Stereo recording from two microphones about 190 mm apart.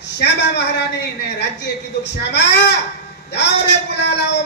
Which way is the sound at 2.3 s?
65° left (ahead or behind).